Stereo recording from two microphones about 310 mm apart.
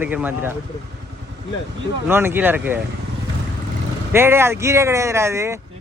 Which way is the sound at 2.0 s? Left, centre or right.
Centre.